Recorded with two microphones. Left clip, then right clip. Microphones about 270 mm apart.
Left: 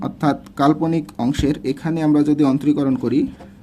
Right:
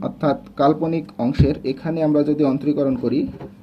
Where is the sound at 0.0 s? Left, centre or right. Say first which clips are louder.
Even; left.